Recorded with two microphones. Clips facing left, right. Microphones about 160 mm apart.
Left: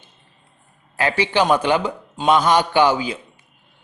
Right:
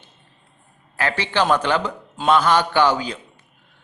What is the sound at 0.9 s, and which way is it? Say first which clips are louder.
A man's voice: left 3 dB; 15° left (ahead or behind).